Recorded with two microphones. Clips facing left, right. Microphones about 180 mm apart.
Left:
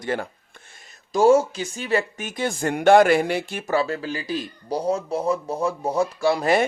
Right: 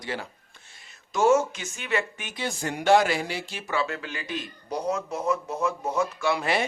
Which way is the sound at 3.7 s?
35° left (ahead or behind).